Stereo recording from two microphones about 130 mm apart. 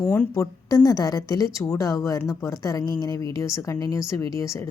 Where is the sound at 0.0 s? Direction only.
20° left (ahead or behind).